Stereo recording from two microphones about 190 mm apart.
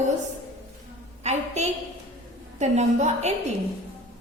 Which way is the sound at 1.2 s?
35° right (ahead or behind).